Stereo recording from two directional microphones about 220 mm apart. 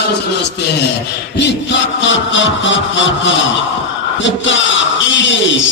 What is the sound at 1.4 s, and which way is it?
A man's voice, 55° left (ahead or behind).